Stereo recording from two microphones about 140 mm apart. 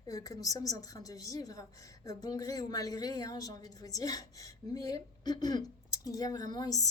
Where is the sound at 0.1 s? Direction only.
25° left (ahead or behind).